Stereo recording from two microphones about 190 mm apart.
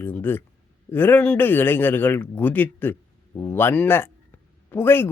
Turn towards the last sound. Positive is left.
turn(degrees=10)  # may be behind; listen again after turning